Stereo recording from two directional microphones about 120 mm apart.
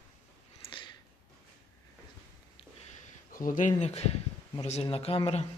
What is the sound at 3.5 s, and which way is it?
Speech, 90° left.